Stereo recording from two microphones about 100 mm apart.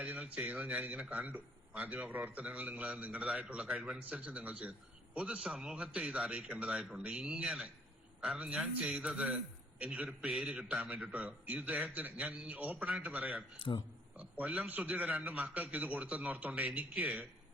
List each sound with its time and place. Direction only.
0.0 s a man's voice: 15° right (ahead or behind)
13.6 s speech: 60° left (ahead or behind)
14.2 s a man's voice: 15° right (ahead or behind)